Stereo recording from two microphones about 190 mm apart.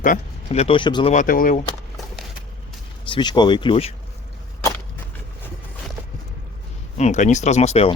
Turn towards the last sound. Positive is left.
turn(degrees=35)  # may be behind; listen again after turning